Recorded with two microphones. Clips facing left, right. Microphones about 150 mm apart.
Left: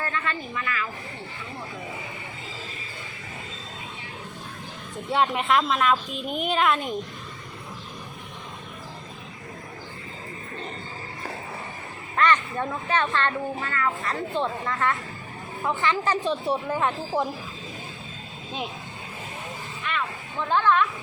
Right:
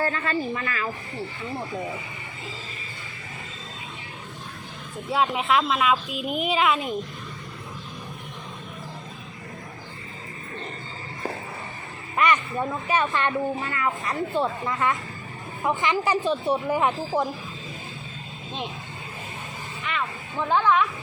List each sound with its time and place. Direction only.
0.0 s speech: 35° right (ahead or behind)
5.0 s speech: centre (ahead or behind)
12.1 s speech: 10° right (ahead or behind)
16.2 s speech: centre (ahead or behind)
20.5 s speech: 15° right (ahead or behind)